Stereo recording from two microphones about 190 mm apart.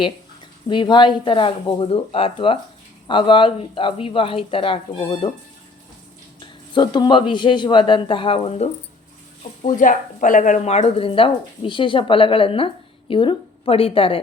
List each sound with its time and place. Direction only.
0.7 s a woman's voice: 25° left (ahead or behind)
6.4 s a woman's voice: 25° left (ahead or behind)